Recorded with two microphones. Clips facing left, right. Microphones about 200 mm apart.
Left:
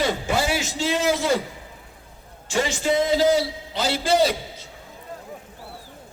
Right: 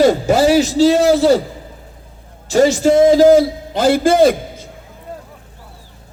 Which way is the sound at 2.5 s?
40° right (ahead or behind).